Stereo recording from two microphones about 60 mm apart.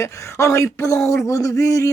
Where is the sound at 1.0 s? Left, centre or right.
Left.